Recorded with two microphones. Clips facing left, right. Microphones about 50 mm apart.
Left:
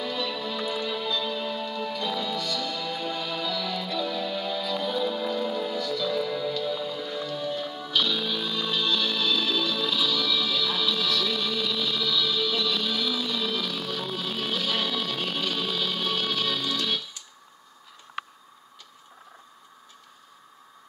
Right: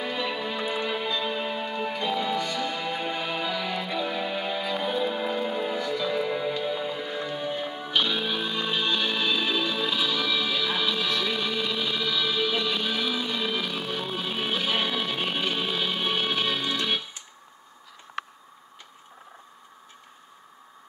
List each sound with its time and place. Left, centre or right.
0.0 s music: right